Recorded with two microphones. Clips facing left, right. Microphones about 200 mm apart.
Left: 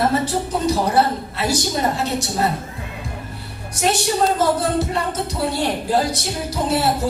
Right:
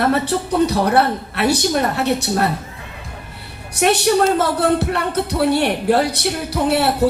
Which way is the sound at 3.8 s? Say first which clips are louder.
Right 4 dB; 65° right (ahead or behind).